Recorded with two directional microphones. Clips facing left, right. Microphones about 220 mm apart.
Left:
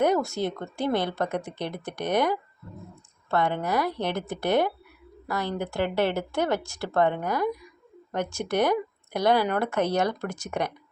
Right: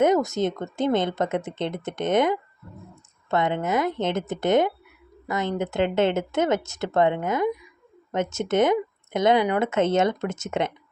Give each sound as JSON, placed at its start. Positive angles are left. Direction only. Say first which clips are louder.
{"t": 0.0, "sound": "speech", "louder": "right 3 dB", "side_deg": -20}